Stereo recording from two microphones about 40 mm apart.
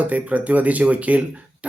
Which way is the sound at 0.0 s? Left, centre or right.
Right.